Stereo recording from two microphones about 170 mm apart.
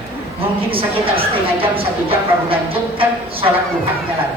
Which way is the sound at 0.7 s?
30° right (ahead or behind).